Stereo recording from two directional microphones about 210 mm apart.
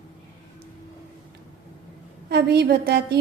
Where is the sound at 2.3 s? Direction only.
50° right (ahead or behind).